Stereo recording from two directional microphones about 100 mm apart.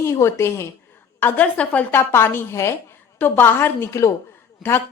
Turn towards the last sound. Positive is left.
turn(degrees=0)  # may be behind; listen again after turning